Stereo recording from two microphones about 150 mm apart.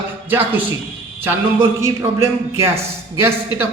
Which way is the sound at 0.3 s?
15° right (ahead or behind).